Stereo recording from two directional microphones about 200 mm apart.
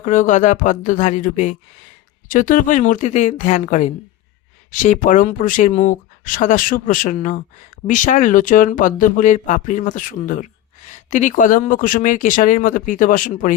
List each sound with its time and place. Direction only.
0.0 s speech: 40° left (ahead or behind)